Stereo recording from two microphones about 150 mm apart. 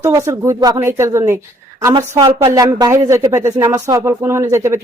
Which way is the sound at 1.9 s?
30° right (ahead or behind).